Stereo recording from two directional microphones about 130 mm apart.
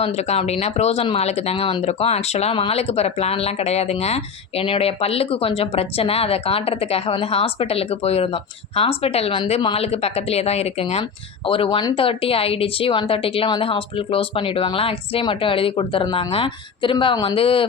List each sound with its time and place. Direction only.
0.0 s speech: 55° left (ahead or behind)